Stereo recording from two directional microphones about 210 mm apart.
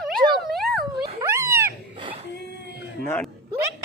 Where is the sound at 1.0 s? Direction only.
20° right (ahead or behind).